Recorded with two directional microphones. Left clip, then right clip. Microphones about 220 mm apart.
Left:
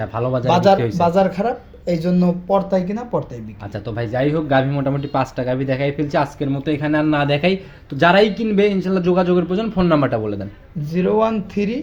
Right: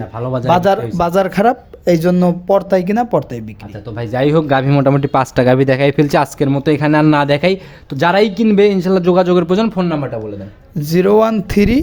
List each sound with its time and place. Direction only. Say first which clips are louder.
0.4 s speech: right 2 dB; 40° right (ahead or behind)
3.9 s speech: right 6 dB; 25° right (ahead or behind)
10.8 s speech: right 7 dB; 55° right (ahead or behind)